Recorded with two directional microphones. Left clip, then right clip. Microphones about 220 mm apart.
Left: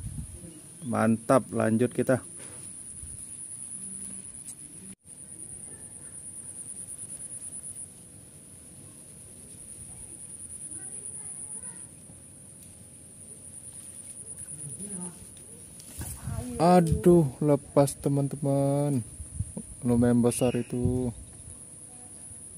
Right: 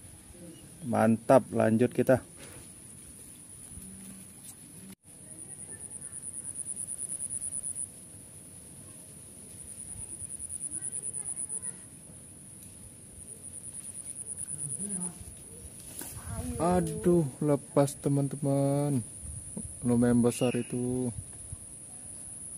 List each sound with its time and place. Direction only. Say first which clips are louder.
0.8 s speech: right 1 dB; centre (ahead or behind)
16.5 s a sound: left 7 dB; 45° left (ahead or behind)
17.0 s speech: left 5 dB; 25° left (ahead or behind); by 21.1 s 10° left (ahead or behind)